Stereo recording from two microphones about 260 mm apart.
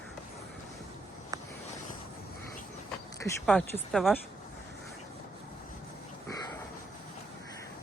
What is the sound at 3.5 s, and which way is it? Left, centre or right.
Speech, centre.